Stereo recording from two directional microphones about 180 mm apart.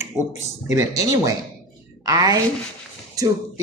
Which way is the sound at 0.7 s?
20° right (ahead or behind).